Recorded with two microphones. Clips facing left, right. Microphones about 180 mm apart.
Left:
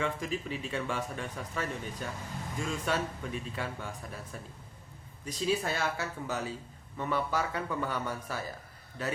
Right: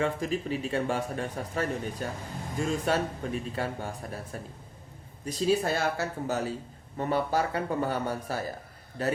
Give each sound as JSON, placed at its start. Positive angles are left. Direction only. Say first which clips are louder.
{"t": 0.0, "sound": "speech", "louder": "right 5 dB", "side_deg": -40}